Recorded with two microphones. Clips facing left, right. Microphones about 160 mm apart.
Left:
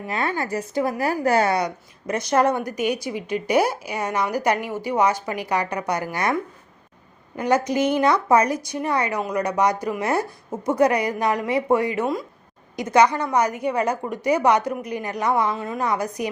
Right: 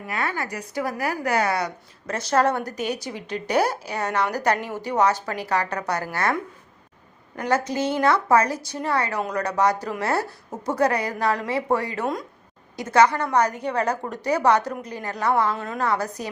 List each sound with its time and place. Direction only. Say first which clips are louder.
0.1 s a woman's voice: left 3 dB; 25° left (ahead or behind)
7.3 s a woman's voice: left 3 dB; 15° left (ahead or behind)
15.5 s a woman's voice: left 2 dB; 5° left (ahead or behind)
15.8 s a woman's voice: left 1 dB; 15° left (ahead or behind)